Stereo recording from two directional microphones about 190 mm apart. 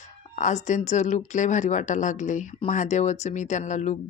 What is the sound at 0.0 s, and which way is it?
Speech, 40° left (ahead or behind).